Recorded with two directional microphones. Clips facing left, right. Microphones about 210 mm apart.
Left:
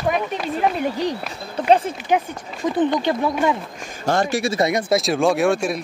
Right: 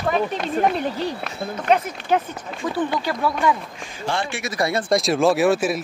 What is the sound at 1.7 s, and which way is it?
Speech, 30° left (ahead or behind).